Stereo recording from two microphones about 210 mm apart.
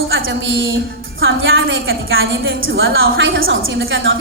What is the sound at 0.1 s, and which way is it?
A woman's voice, 65° right (ahead or behind).